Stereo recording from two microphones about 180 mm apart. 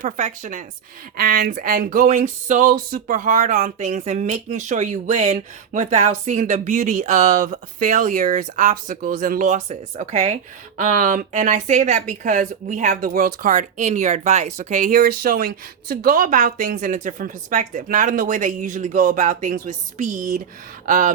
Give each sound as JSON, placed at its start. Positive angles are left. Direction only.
{"t": 0.0, "sound": "speech", "side_deg": -45}